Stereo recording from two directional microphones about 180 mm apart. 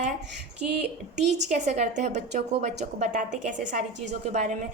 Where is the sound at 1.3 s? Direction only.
40° right (ahead or behind).